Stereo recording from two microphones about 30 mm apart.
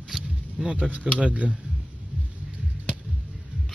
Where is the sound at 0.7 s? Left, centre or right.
Right.